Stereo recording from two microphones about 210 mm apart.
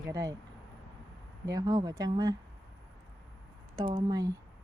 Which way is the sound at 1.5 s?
20° right (ahead or behind).